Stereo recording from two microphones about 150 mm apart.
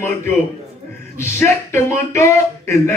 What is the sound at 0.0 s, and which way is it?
Speech, 15° left (ahead or behind).